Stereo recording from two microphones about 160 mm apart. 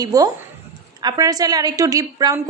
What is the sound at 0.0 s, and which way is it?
A woman's voice, 25° right (ahead or behind).